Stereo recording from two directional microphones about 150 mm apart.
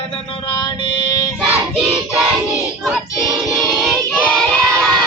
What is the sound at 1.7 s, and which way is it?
Singing, 5° right (ahead or behind).